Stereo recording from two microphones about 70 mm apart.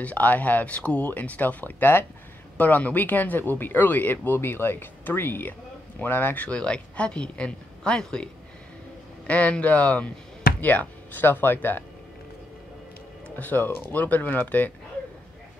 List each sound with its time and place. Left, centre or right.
0.0 s a woman's voice: left
9.3 s speech: centre
13.4 s speech: left